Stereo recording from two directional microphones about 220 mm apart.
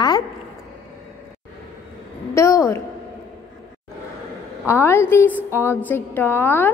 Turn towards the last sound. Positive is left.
turn(degrees=10)  # may be behind; listen again after turning